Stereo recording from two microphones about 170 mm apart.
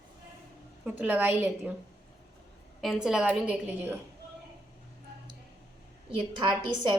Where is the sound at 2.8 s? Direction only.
Centre (ahead or behind).